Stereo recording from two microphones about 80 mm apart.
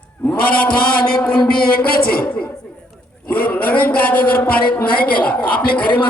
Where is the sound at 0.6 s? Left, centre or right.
Centre.